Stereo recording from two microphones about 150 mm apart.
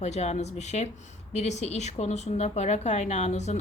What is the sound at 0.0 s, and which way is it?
A woman's voice, 45° left (ahead or behind).